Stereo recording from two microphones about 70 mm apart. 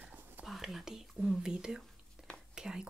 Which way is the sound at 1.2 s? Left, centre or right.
Centre.